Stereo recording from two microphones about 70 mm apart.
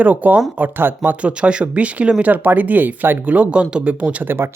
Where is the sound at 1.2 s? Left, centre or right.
Centre.